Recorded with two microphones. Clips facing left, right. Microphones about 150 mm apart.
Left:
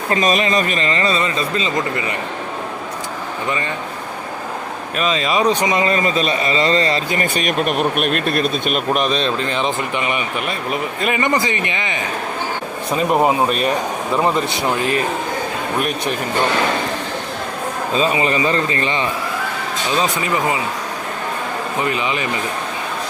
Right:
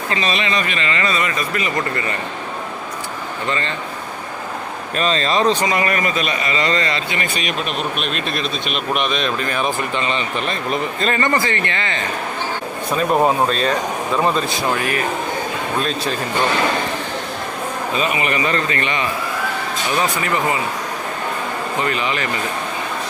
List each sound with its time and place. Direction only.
0.1 s a man's voice: 45° left (ahead or behind); by 2.1 s 15° left (ahead or behind)
4.9 s a man's voice: 10° left (ahead or behind)
17.9 s a man's voice: 25° left (ahead or behind)
21.8 s a man's voice: 20° left (ahead or behind)